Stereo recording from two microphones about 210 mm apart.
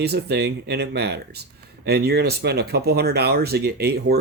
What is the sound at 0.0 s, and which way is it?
Speech, 50° right (ahead or behind).